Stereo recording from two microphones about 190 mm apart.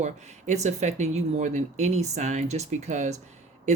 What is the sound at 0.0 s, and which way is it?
Speech, 40° right (ahead or behind).